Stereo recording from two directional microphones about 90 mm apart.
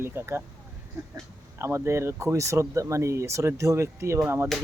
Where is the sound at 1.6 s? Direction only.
30° right (ahead or behind).